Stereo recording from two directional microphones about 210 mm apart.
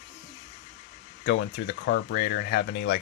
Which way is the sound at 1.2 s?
55° left (ahead or behind).